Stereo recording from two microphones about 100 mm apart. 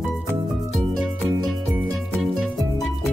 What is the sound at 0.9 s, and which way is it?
Music, centre (ahead or behind).